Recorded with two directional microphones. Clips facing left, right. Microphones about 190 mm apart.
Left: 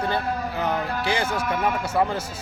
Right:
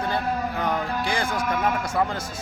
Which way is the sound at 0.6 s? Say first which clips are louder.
Even; 5° left (ahead or behind).